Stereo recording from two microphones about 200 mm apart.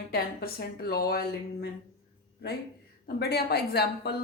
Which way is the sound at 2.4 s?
50° left (ahead or behind).